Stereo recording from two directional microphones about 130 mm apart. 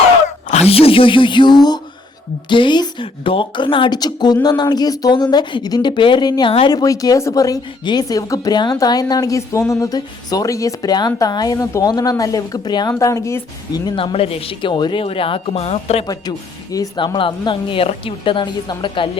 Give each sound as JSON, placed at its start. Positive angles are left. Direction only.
{"t": 0.4, "sound": "speech", "side_deg": 55}
{"t": 13.8, "sound": "speech", "side_deg": 45}
{"t": 16.7, "sound": "speech", "side_deg": 30}
{"t": 17.2, "sound": "speech", "side_deg": 40}